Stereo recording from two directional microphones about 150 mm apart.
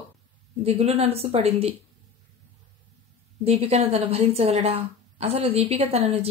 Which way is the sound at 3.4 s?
45° right (ahead or behind).